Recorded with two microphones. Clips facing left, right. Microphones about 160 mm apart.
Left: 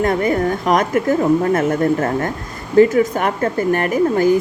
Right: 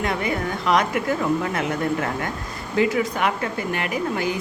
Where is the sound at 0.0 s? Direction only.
45° left (ahead or behind).